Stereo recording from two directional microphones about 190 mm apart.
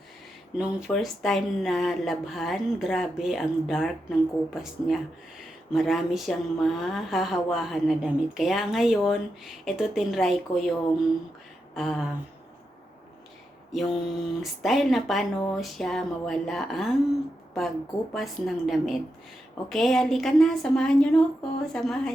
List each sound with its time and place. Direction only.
0.5 s speech: 5° right (ahead or behind)
11.7 s a sound: centre (ahead or behind)
13.7 s speech: centre (ahead or behind)
18.1 s speech: centre (ahead or behind)